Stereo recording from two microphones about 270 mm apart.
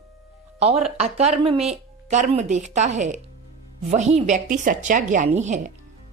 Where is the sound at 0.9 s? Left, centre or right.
Right.